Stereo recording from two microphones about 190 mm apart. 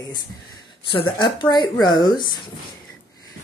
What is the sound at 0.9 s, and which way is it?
Speech, 25° left (ahead or behind).